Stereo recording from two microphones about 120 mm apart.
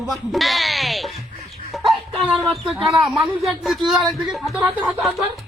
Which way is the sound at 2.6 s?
Centre (ahead or behind).